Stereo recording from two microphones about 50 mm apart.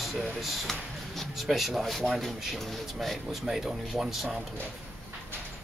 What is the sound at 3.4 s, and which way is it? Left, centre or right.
Speech, centre.